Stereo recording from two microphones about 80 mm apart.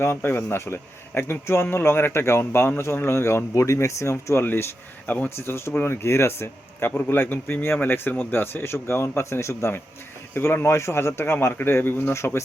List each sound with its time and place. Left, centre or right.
0.0 s speech: left
5.0 s speech: centre
5.4 s speech: left